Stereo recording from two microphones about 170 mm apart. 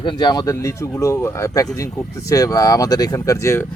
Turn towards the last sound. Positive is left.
turn(degrees=15)  # may be behind; listen again after turning